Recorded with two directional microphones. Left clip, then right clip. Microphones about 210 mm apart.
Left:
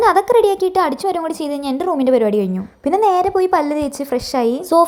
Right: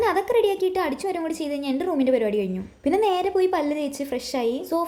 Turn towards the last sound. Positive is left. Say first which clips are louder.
# left 10 dB
turn(degrees=20)  # may be behind; listen again after turning